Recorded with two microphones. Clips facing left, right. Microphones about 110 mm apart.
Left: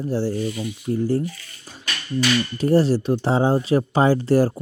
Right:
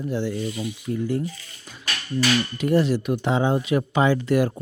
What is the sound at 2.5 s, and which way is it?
Speech, 35° left (ahead or behind).